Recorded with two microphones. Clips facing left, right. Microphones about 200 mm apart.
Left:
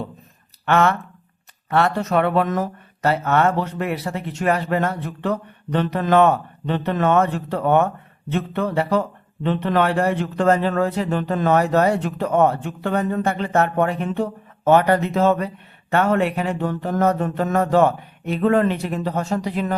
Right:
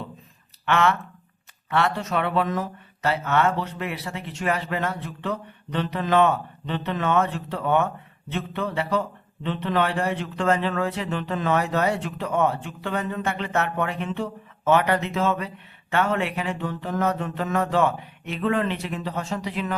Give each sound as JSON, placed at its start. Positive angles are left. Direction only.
{"t": 0.6, "sound": "speech", "side_deg": 45}